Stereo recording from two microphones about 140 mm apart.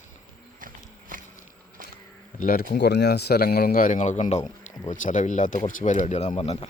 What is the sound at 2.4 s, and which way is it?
A man's voice, 90° left.